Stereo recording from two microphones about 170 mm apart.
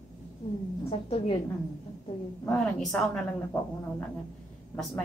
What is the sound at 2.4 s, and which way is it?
Speech, 5° left (ahead or behind).